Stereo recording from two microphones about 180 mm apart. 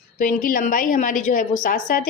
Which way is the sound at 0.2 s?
50° left (ahead or behind).